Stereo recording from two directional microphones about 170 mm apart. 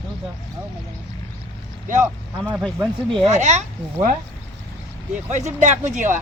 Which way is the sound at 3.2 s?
45° right (ahead or behind).